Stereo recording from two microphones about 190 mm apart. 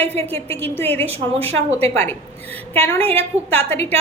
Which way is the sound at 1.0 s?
30° right (ahead or behind).